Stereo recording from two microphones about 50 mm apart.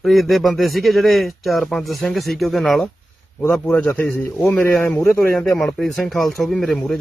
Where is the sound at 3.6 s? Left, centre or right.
Left.